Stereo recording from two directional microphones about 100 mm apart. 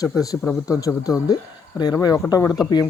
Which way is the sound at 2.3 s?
35° left (ahead or behind).